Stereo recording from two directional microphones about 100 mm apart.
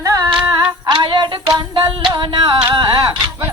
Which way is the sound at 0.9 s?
50° right (ahead or behind).